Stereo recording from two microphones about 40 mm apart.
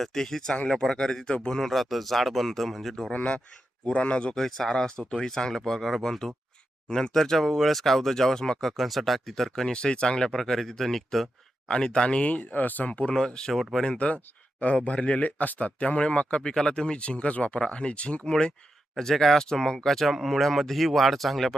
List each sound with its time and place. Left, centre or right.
0.0 s speech: centre
1.5 s speech: centre
3.1 s speech: left
4.4 s speech: centre
8.7 s speech: centre
9.6 s speech: left; by 11.3 s centre
11.7 s speech: left
12.2 s speech: left
12.9 s speech: left
13.1 s speech: centre
14.0 s speech: left
17.0 s speech: left
18.3 s speech: left
18.9 s speech: centre